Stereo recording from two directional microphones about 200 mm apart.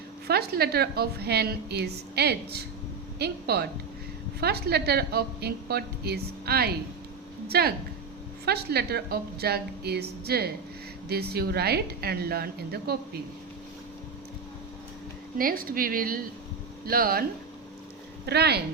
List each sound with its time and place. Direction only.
0.3 s a woman's voice: 50° right (ahead or behind)
15.4 s a woman's voice: 45° right (ahead or behind)
18.3 s speech: 55° right (ahead or behind)